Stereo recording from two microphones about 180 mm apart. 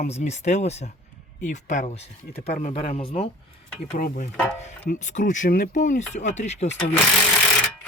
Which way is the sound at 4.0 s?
45° left (ahead or behind).